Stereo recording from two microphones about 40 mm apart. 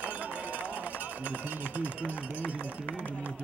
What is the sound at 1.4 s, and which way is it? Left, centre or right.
Speech, right.